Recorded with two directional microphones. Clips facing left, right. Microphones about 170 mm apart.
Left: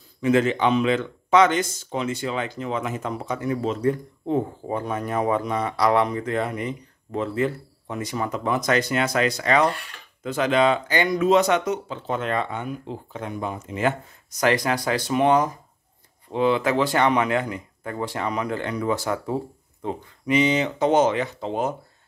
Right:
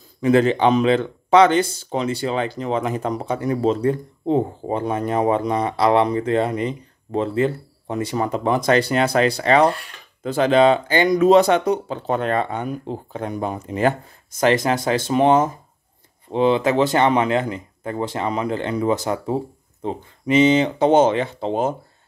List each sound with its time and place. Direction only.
0.2 s a man's voice: 35° right (ahead or behind)